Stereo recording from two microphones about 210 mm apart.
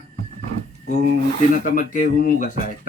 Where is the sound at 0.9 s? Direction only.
40° left (ahead or behind).